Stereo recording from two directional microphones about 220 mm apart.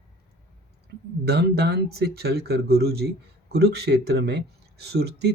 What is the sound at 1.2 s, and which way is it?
Speech, 45° right (ahead or behind).